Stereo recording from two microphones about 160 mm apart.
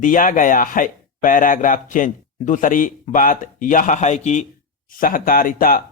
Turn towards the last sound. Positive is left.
turn(degrees=60)  # may be behind; listen again after turning